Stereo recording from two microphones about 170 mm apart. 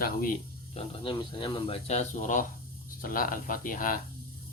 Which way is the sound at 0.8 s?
30° left (ahead or behind).